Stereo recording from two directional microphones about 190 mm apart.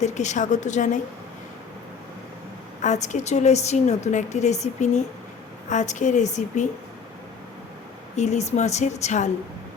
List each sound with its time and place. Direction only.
0.0 s a woman's voice: 40° left (ahead or behind)
2.8 s a woman's voice: 40° left (ahead or behind)
8.1 s a woman's voice: 35° left (ahead or behind)